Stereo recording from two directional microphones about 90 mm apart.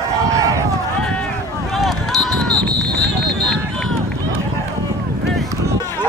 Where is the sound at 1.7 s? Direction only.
Centre (ahead or behind).